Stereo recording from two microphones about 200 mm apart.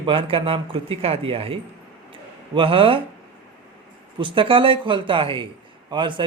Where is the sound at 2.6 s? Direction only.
25° right (ahead or behind).